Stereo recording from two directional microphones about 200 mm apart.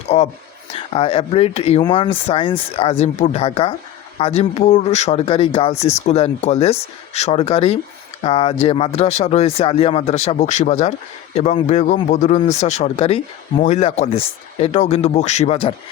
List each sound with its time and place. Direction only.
0.1 s speech: 30° left (ahead or behind)